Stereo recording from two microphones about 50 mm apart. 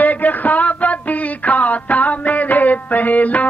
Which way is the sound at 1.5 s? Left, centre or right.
Left.